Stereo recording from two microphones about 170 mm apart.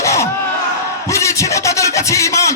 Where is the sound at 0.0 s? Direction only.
15° left (ahead or behind).